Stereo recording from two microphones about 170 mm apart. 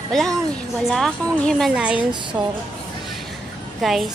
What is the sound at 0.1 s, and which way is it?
Speech, 5° left (ahead or behind).